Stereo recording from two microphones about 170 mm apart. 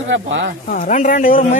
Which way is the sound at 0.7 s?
50° left (ahead or behind).